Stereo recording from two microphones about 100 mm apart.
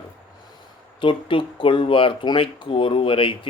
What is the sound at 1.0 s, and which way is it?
Speech, 55° left (ahead or behind).